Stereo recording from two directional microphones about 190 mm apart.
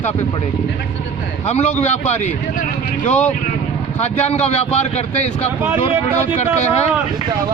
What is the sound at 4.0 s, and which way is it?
Speech, 35° left (ahead or behind).